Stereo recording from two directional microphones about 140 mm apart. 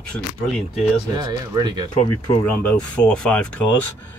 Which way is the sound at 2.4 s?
10° left (ahead or behind).